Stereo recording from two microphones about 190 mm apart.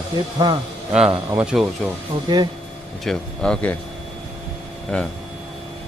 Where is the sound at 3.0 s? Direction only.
5° left (ahead or behind).